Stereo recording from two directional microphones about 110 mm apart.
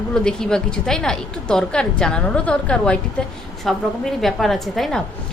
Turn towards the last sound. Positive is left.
turn(degrees=0)  # may be behind; listen again after turning